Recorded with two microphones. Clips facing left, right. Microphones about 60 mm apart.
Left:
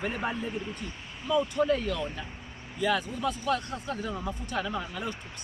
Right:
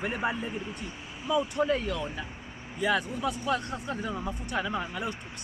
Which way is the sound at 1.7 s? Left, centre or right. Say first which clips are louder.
Left 1 dB; right.